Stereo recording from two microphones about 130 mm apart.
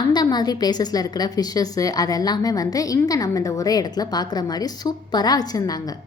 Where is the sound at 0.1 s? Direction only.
35° left (ahead or behind).